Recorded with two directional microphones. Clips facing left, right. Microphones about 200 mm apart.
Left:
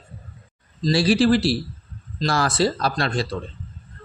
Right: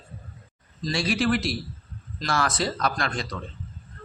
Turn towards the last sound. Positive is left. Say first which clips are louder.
# left 6 dB
turn(degrees=30)  # may be behind; listen again after turning